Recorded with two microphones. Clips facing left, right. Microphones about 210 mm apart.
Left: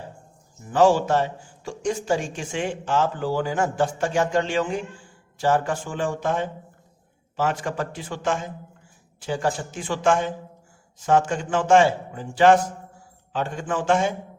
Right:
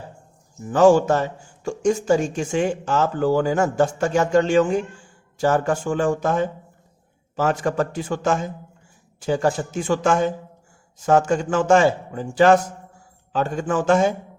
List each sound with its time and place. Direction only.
0.7 s a man's voice: 45° right (ahead or behind)